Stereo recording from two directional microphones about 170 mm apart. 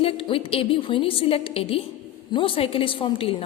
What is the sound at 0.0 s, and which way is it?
A woman's voice, 35° left (ahead or behind).